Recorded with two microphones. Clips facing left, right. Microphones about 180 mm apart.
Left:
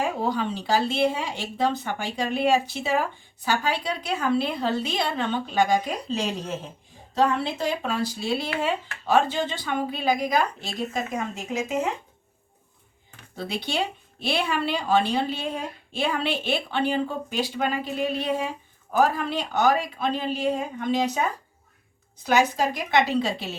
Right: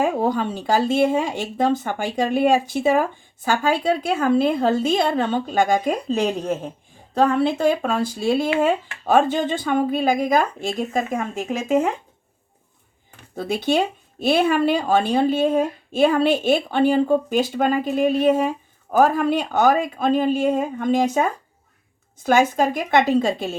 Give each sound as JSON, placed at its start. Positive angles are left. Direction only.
{"t": 0.0, "sound": "speech", "side_deg": -50}
{"t": 13.3, "sound": "speech", "side_deg": -50}